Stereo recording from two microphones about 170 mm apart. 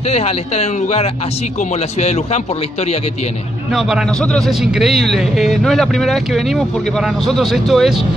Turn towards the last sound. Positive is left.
turn(degrees=0)  # may be behind; listen again after turning